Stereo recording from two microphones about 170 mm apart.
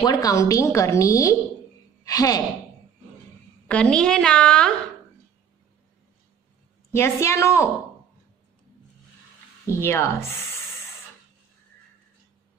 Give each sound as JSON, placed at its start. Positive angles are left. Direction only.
{"t": 0.0, "sound": "a woman's voice", "side_deg": 20}
{"t": 3.6, "sound": "a woman's voice", "side_deg": 5}
{"t": 6.9, "sound": "a woman's voice", "side_deg": 15}
{"t": 9.7, "sound": "a woman's voice", "side_deg": 15}